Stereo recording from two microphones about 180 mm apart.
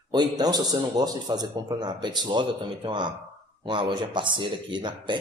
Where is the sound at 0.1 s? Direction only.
20° right (ahead or behind).